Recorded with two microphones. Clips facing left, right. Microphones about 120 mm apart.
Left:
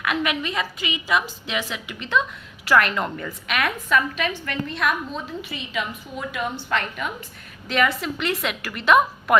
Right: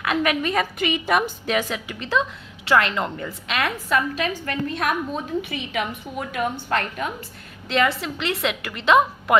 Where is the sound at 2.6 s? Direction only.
25° right (ahead or behind); by 7.1 s 40° right (ahead or behind).